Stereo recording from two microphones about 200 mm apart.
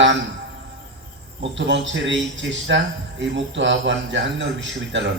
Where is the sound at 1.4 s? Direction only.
65° right (ahead or behind).